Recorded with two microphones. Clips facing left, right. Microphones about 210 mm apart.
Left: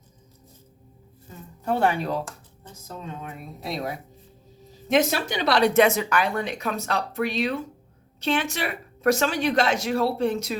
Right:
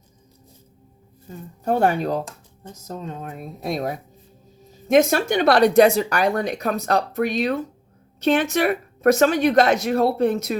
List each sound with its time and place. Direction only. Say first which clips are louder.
1.6 s speech: right 4 dB; 45° right (ahead or behind)